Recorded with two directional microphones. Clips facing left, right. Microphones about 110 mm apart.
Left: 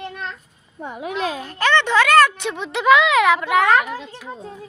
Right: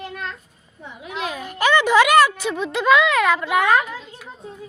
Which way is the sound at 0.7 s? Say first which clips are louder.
Left 9 dB; 55° left (ahead or behind).